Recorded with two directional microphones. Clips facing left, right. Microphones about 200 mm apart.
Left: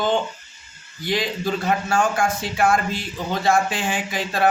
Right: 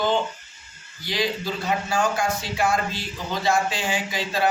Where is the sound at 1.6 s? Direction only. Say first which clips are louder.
Left 2 dB; 50° left (ahead or behind).